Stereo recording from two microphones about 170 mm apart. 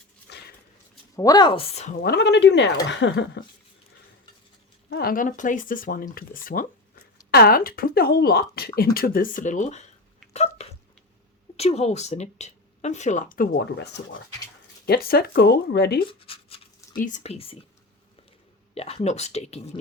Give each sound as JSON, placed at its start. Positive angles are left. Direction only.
{"t": 0.3, "sound": "dog", "side_deg": 75}
{"t": 1.1, "sound": "speech", "side_deg": 20}
{"t": 2.0, "sound": "speech", "side_deg": 75}
{"t": 4.9, "sound": "speech", "side_deg": 65}
{"t": 10.3, "sound": "a sound", "side_deg": 40}
{"t": 11.5, "sound": "speech", "side_deg": 40}
{"t": 14.8, "sound": "speech", "side_deg": 65}
{"t": 16.2, "sound": "a sound", "side_deg": 35}
{"t": 16.9, "sound": "speech", "side_deg": 50}
{"t": 18.7, "sound": "speech", "side_deg": 35}